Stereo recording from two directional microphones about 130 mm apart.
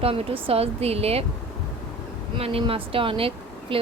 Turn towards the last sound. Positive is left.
turn(degrees=-45)  # may be behind; listen again after turning